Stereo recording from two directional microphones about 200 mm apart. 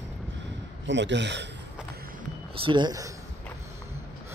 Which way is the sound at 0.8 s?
65° right (ahead or behind).